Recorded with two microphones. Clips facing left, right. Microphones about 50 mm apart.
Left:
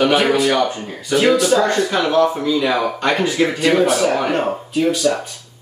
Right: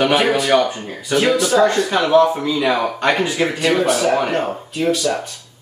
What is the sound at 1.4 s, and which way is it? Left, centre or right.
Speech, right.